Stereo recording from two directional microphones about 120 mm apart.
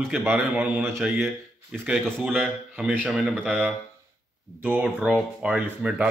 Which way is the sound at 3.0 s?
10° right (ahead or behind).